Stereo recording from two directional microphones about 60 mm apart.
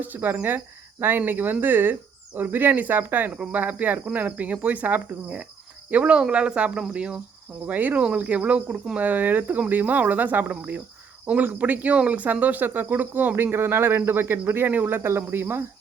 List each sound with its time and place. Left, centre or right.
0.0 s speech: right
6.9 s cricket: centre
7.7 s speech: right